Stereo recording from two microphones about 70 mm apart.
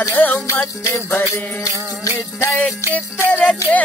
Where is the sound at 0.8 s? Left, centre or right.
Left.